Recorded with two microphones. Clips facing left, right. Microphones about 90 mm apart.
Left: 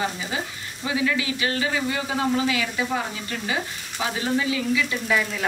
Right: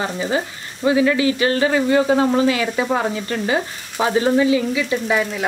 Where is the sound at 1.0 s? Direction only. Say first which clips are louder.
Right 8 dB; 45° right (ahead or behind).